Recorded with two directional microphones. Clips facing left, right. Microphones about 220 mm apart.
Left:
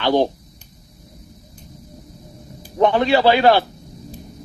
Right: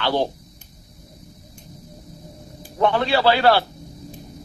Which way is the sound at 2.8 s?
15° left (ahead or behind).